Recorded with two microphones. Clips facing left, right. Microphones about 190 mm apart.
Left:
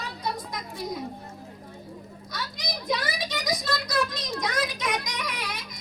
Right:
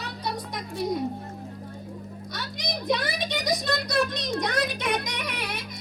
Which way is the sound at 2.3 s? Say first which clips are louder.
Right 1 dB; 60° right (ahead or behind).